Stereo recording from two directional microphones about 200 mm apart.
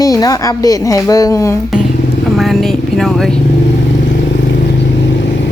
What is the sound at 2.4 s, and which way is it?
Speech, centre (ahead or behind).